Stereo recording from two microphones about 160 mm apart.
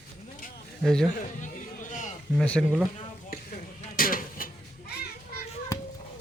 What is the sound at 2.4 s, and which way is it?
Speech, 5° left (ahead or behind).